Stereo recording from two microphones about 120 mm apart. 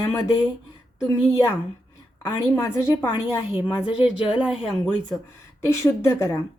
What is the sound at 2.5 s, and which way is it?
Speech, 20° left (ahead or behind).